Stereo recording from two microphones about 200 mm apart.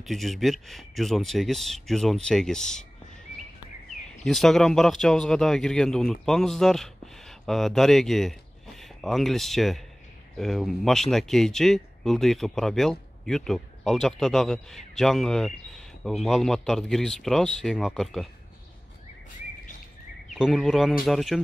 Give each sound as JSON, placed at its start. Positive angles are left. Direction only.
{"t": 0.0, "sound": "a man's voice", "side_deg": 0}
{"t": 4.2, "sound": "a man's voice", "side_deg": 0}
{"t": 20.3, "sound": "a man's voice", "side_deg": 0}